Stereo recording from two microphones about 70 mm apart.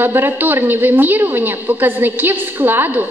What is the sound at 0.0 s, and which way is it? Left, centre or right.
A woman's voice, right.